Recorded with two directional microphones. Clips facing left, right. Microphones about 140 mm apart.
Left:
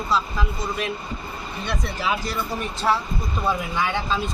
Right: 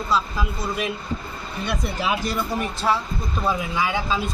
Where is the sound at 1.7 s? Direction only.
15° right (ahead or behind).